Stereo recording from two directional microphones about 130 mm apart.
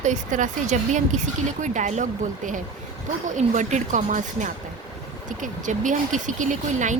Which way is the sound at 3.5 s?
70° right (ahead or behind).